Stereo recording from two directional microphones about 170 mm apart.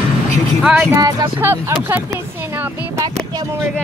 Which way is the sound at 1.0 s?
15° right (ahead or behind).